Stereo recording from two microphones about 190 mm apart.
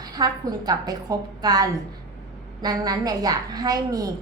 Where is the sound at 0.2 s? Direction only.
20° right (ahead or behind).